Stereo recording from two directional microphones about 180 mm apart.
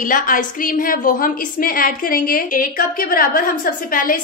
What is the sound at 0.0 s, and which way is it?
A woman's voice, 50° left (ahead or behind).